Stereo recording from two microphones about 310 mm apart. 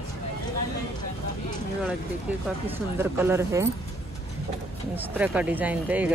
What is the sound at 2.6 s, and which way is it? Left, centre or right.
Speech, centre.